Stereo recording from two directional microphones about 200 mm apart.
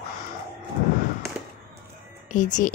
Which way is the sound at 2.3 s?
40° left (ahead or behind).